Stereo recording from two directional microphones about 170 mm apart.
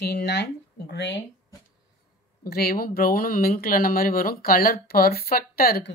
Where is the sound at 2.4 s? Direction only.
65° left (ahead or behind).